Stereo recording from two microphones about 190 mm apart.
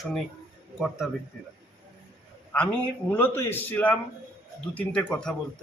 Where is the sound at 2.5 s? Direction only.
10° left (ahead or behind).